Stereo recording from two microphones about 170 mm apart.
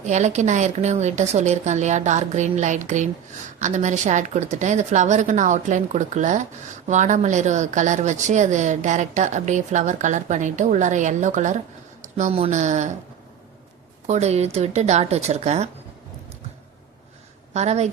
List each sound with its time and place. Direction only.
0.0 s speech: 45° right (ahead or behind)
14.1 s a woman's voice: 40° right (ahead or behind)
17.5 s speech: 40° right (ahead or behind)